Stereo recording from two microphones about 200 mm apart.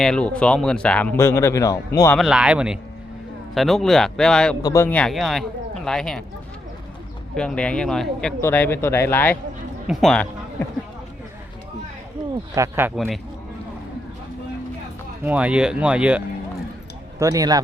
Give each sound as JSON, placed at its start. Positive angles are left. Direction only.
{"t": 0.0, "sound": "speech", "side_deg": 5}
{"t": 2.1, "sound": "speech", "side_deg": 0}
{"t": 4.6, "sound": "speech", "side_deg": 15}
{"t": 7.3, "sound": "speech", "side_deg": 5}
{"t": 12.5, "sound": "speech", "side_deg": -15}
{"t": 15.2, "sound": "speech", "side_deg": -5}
{"t": 17.2, "sound": "speech", "side_deg": -15}